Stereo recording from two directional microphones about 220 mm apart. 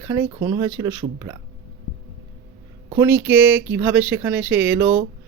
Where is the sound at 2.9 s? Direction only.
10° right (ahead or behind).